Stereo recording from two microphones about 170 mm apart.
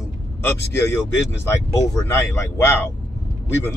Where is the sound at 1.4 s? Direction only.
20° left (ahead or behind).